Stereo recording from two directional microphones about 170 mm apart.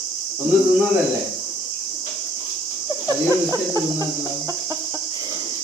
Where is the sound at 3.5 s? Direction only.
20° right (ahead or behind).